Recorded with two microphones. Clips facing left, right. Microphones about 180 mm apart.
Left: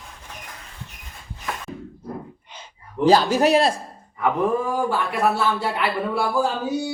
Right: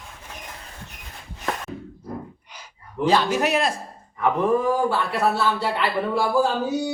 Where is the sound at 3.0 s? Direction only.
35° left (ahead or behind).